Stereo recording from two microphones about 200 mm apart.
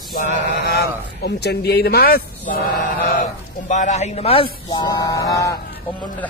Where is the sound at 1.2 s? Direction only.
55° left (ahead or behind).